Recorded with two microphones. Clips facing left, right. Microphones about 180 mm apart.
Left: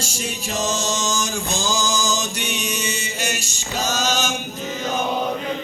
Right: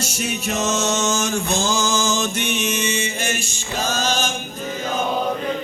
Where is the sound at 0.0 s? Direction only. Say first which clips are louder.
Right 4 dB; 65° right (ahead or behind).